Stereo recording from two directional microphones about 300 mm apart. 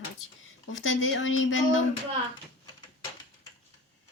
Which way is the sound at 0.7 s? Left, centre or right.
Left.